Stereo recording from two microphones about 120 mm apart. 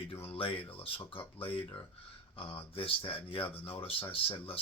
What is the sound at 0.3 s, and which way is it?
Speech, 50° left (ahead or behind).